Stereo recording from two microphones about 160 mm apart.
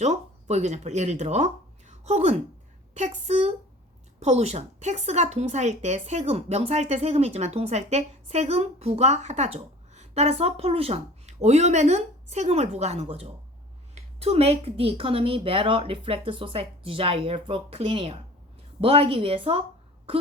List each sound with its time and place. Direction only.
0.0 s a woman's voice: 45° right (ahead or behind)
1.9 s a sound: 45° right (ahead or behind)
2.9 s a woman's voice: 45° right (ahead or behind)